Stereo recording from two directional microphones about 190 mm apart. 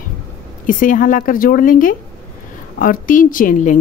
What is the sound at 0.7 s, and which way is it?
A woman's voice, 45° left (ahead or behind).